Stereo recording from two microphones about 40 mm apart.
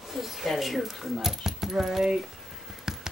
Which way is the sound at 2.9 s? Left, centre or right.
Centre.